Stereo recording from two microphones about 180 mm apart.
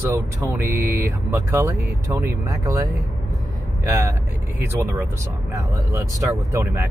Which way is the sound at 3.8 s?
15° right (ahead or behind).